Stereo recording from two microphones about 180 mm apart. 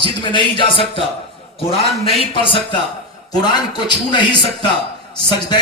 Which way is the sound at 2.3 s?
30° left (ahead or behind).